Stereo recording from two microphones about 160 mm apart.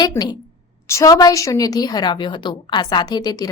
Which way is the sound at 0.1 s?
25° left (ahead or behind).